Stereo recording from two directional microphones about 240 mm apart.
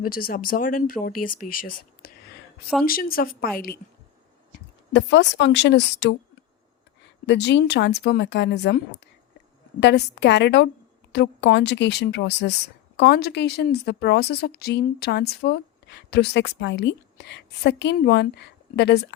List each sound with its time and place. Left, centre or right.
0.0 s speech: left
2.0 s a sound: left
2.8 s speech: left
4.9 s speech: left
7.3 s speech: left
9.8 s speech: left